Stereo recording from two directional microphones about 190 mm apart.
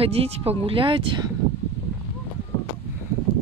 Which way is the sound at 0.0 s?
30° right (ahead or behind).